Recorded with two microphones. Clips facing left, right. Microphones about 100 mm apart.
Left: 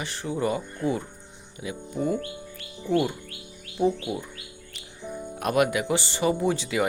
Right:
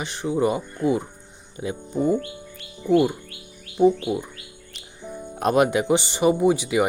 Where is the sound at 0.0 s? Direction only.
20° right (ahead or behind).